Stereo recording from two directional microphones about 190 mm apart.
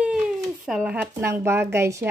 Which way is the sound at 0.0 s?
5° right (ahead or behind).